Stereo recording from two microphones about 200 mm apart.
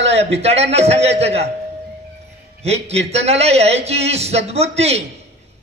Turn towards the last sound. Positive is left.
turn(degrees=-30)  # may be behind; listen again after turning